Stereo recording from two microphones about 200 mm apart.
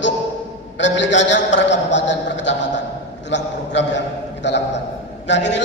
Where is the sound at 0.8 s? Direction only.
65° left (ahead or behind).